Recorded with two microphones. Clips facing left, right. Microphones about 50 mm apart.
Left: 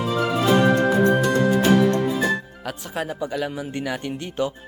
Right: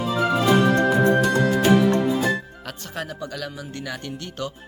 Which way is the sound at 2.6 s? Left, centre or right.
Centre.